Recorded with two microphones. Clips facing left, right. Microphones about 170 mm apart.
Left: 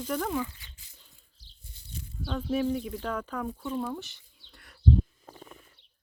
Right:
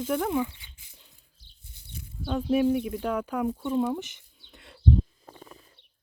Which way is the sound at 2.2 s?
10° right (ahead or behind).